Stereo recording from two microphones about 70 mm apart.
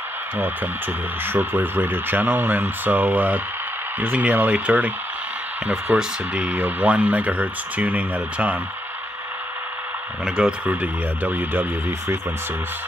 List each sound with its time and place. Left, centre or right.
1.2 s speech: right
10.2 s speech: centre
10.7 s speech: right